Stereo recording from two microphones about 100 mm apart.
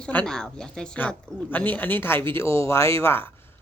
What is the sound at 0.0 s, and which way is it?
Speech, 15° left (ahead or behind).